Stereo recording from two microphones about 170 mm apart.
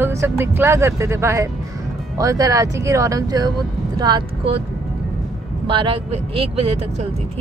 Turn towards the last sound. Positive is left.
turn(degrees=-35)  # may be behind; listen again after turning